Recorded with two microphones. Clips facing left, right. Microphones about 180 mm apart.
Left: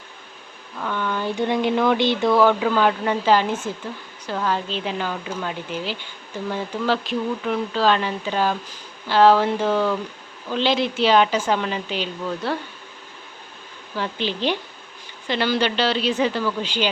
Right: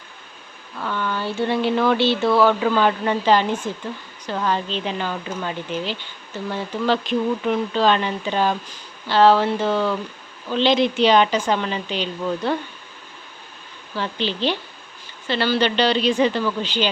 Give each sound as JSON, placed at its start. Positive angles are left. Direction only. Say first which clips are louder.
{"t": 0.8, "sound": "speech", "louder": "even", "side_deg": 5}
{"t": 2.6, "sound": "speech", "louder": "right 1 dB", "side_deg": 0}
{"t": 14.3, "sound": "speech", "louder": "even", "side_deg": 15}